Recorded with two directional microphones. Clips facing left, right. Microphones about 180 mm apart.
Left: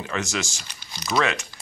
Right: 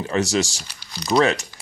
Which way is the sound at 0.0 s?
35° right (ahead or behind).